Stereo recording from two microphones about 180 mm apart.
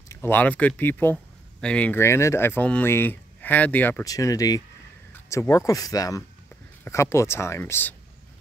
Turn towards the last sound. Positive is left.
turn(degrees=10)  # may be behind; listen again after turning